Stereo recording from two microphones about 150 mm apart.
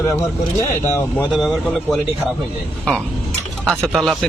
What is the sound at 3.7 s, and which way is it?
Speech, 5° left (ahead or behind).